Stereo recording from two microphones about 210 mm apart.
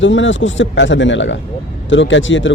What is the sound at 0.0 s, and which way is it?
A man's voice, 65° left (ahead or behind).